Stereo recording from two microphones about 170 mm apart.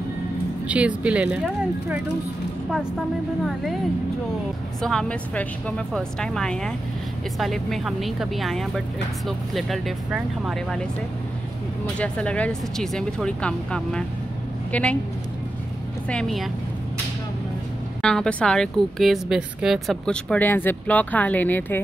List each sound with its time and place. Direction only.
0.7 s speech: 5° right (ahead or behind)
4.8 s a woman's voice: 5° left (ahead or behind)
12.0 s a woman's voice: 5° left (ahead or behind)
16.1 s a woman's voice: 5° left (ahead or behind)
18.0 s a woman's voice: 5° left (ahead or behind)